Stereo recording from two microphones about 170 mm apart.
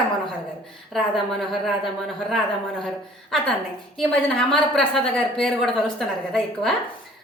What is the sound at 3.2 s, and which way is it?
A woman's voice, centre (ahead or behind).